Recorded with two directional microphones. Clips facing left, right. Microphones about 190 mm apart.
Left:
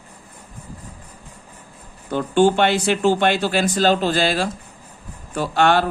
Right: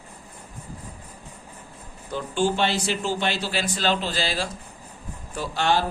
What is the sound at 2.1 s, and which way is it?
Speech, 60° left (ahead or behind).